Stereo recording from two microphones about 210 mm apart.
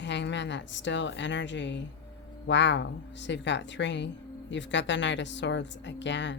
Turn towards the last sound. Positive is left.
turn(degrees=60)  # may be behind; listen again after turning